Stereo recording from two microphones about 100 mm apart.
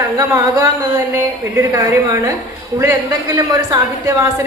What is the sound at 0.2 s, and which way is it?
A woman's voice, 30° right (ahead or behind).